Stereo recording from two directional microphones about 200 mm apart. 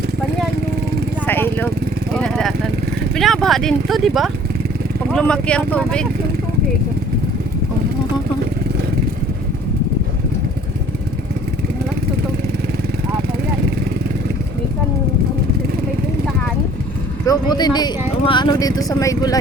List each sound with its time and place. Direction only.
1.2 s vehicle: 10° left (ahead or behind)
3.2 s speech: centre (ahead or behind)
17.2 s speech: 20° left (ahead or behind)